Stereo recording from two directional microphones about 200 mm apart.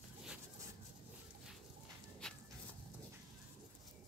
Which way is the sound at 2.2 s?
5° left (ahead or behind).